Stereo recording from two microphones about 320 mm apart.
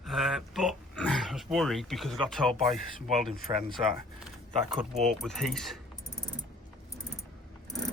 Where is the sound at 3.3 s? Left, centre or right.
Left.